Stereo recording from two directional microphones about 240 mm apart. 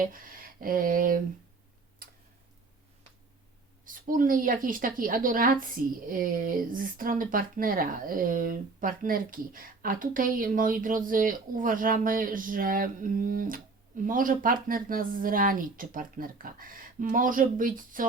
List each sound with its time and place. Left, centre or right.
0.0 s a woman's voice: right
2.0 s tick: right
3.8 s a woman's voice: right